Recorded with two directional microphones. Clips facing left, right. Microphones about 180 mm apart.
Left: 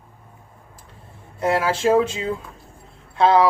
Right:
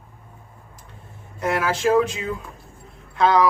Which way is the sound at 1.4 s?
30° left (ahead or behind).